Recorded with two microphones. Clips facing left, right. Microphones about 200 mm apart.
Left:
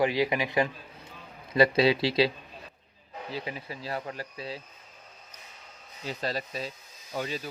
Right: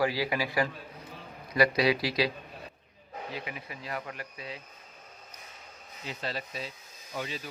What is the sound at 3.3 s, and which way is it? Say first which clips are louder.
Speech: left 6 dB; 30° left (ahead or behind).